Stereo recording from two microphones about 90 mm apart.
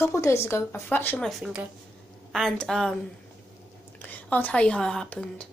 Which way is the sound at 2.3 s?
5° left (ahead or behind).